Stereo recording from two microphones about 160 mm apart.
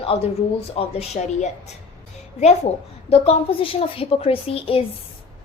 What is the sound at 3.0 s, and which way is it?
A woman's voice, 40° left (ahead or behind).